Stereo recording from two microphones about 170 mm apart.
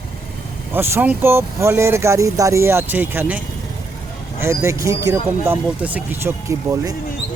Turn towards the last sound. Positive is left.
turn(degrees=-20)  # may be behind; listen again after turning